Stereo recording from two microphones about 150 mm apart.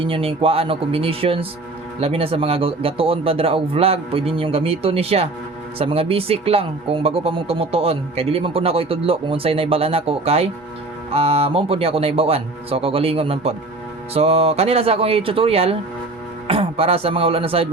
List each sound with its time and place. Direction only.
0.0 s speech: 35° right (ahead or behind)